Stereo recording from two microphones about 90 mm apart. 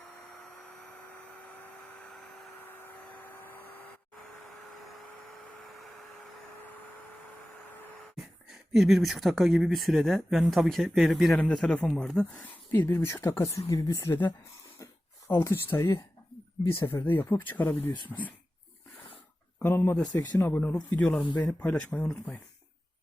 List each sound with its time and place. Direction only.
0.3 s vacuum cleaner: 5° left (ahead or behind)
2.0 s a sound: 5° left (ahead or behind)
2.6 s a sound: 25° left (ahead or behind)
4.4 s a sound: centre (ahead or behind)
8.7 s speech: centre (ahead or behind)
12.2 s speech: 20° left (ahead or behind); by 14.1 s 35° left (ahead or behind)
14.1 s speech: 25° left (ahead or behind)
19.6 s speech: 25° left (ahead or behind)
20.1 s speech: 45° left (ahead or behind)
20.5 s speech: 20° left (ahead or behind)